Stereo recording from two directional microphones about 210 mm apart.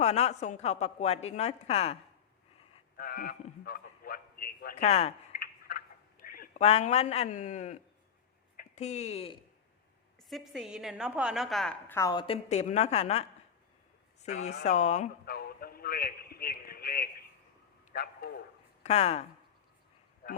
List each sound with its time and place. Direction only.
0.0 s a woman's voice: 30° left (ahead or behind)
3.0 s a sound: 45° left (ahead or behind)
4.9 s speech: 30° left (ahead or behind)
5.4 s a sound: 45° left (ahead or behind)
6.6 s a woman's voice: 30° left (ahead or behind)
10.2 s a woman's voice: centre (ahead or behind)
11.9 s a woman's voice: 20° left (ahead or behind); by 17.1 s 45° left (ahead or behind)
17.9 s a sound: 45° left (ahead or behind)
18.8 s speech: 30° left (ahead or behind)